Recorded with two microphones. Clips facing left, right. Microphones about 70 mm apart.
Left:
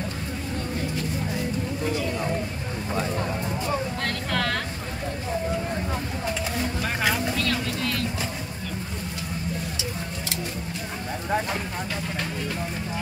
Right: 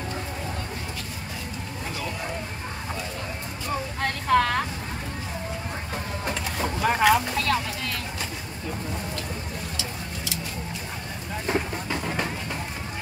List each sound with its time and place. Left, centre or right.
4.0 s vehicle: centre
7.0 s boat: centre